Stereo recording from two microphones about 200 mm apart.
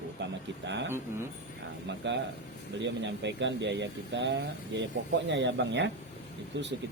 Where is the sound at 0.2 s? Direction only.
60° right (ahead or behind).